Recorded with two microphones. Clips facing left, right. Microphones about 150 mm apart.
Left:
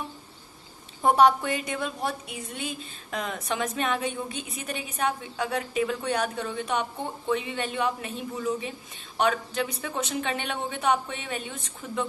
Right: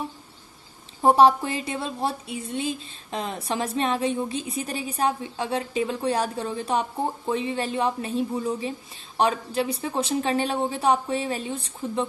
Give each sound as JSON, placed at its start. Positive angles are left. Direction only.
{"t": 1.0, "sound": "a woman's voice", "side_deg": -30}